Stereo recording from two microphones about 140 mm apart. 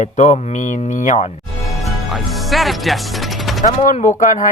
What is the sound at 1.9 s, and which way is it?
Music, centre (ahead or behind).